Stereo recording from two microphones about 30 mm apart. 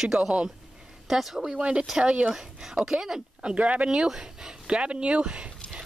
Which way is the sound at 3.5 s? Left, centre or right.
Right.